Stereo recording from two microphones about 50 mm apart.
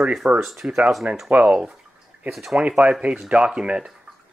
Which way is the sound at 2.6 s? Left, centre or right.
Right.